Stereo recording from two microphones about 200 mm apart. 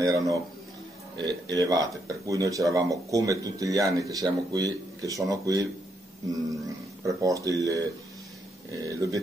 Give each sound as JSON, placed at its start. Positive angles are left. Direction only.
{"t": 0.0, "sound": "a sound", "side_deg": -15}
{"t": 1.1, "sound": "speech", "side_deg": -20}
{"t": 7.1, "sound": "speech", "side_deg": -15}